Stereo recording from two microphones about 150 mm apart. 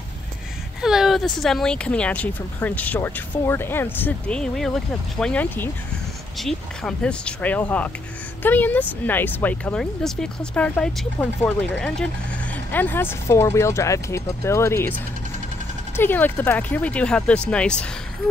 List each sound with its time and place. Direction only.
0.8 s speech: 5° right (ahead or behind); by 15.0 s 15° left (ahead or behind)
16.0 s speech: 15° left (ahead or behind)